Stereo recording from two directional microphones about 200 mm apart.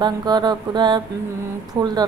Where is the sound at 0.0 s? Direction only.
20° right (ahead or behind).